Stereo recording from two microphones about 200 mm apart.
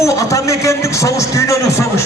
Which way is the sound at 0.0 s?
15° left (ahead or behind).